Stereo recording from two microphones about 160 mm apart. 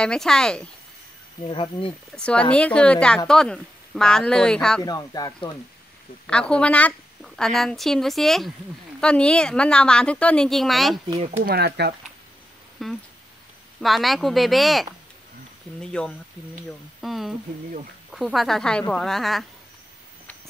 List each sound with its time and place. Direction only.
0.0 s a woman's voice: 5° left (ahead or behind)
1.4 s speech: 35° left (ahead or behind)
2.1 s a woman's voice: 5° left (ahead or behind)
4.8 s speech: 25° left (ahead or behind)
6.2 s a woman's voice: 5° left (ahead or behind)
11.2 s speech: 55° right (ahead or behind)
11.5 s speech: 90° right
12.8 s a woman's voice: centre (ahead or behind)